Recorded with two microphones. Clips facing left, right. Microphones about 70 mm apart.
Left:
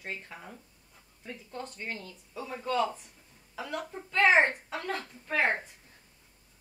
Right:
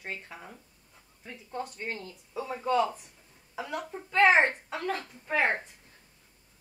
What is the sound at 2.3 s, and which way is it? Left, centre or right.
Speech, centre.